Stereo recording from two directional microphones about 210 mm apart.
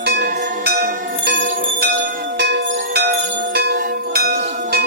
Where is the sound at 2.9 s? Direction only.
50° right (ahead or behind).